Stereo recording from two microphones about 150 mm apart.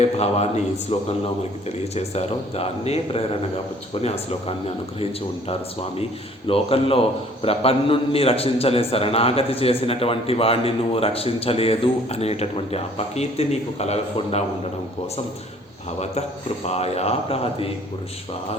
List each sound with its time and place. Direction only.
0.0 s a man's voice: 45° left (ahead or behind)
6.5 s a man's voice: 40° left (ahead or behind)
16.6 s a man's voice: 45° left (ahead or behind)